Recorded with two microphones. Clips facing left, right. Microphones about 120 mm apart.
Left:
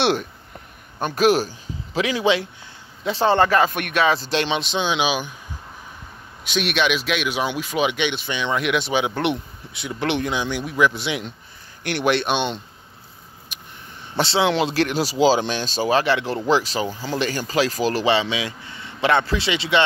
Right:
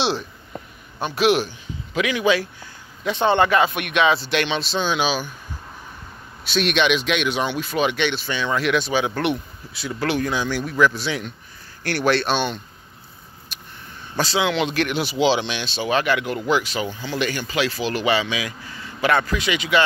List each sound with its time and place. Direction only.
0.0 s speech: 55° left (ahead or behind)
1.0 s speech: 45° left (ahead or behind)
4.4 s speech: 25° left (ahead or behind)
6.4 s speech: 10° left (ahead or behind)
13.5 s a sound: 15° left (ahead or behind)
14.1 s speech: 25° left (ahead or behind)